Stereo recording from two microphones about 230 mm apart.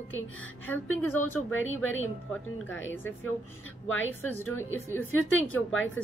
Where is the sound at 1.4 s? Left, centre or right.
Left.